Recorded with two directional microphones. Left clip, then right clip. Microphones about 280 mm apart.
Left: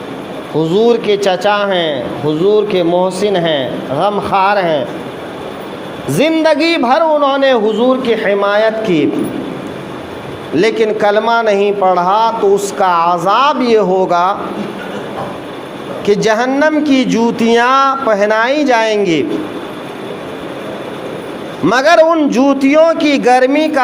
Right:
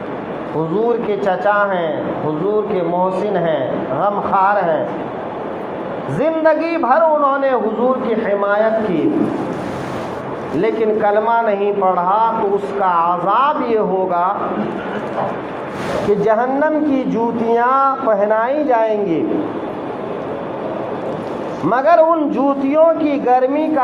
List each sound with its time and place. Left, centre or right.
0.8 s speech: left
6.1 s speech: left
10.6 s speech: left
16.2 s speech: left
21.7 s speech: left